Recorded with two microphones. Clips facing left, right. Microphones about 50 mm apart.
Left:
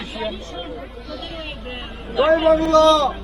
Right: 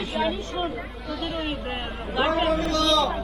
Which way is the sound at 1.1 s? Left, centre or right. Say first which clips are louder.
Right 4 dB; centre.